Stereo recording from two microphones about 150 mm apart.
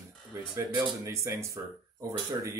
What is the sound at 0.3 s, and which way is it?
Speech, 20° right (ahead or behind).